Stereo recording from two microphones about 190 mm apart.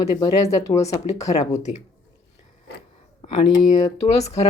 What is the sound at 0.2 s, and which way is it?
Speech, 15° left (ahead or behind).